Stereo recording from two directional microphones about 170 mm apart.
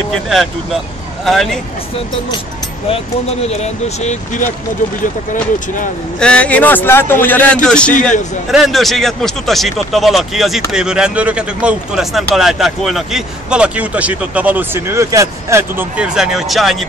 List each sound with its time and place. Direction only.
1.2 s speech: centre (ahead or behind)
3.4 s speech: 40° left (ahead or behind)
6.1 s a man's voice: 5° left (ahead or behind)